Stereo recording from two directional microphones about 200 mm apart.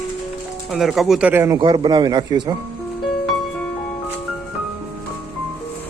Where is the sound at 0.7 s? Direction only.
Centre (ahead or behind); by 2.6 s 20° right (ahead or behind).